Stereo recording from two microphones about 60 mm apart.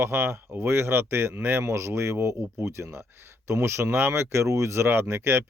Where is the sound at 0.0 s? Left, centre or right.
Right.